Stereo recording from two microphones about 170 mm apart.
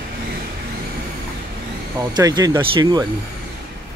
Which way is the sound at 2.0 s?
25° right (ahead or behind).